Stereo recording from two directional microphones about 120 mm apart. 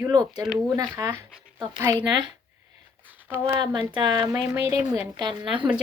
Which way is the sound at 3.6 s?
40° right (ahead or behind).